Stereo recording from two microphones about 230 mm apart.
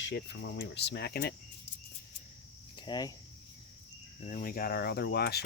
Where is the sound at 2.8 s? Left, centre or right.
Centre.